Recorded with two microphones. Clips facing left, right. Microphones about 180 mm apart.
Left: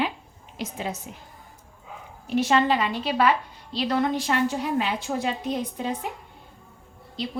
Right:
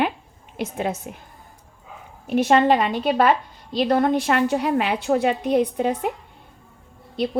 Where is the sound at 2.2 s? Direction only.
55° right (ahead or behind).